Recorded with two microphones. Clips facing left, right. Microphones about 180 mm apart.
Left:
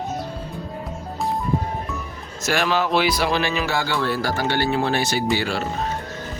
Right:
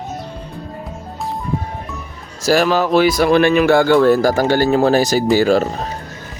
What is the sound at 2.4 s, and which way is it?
Speech, 40° right (ahead or behind).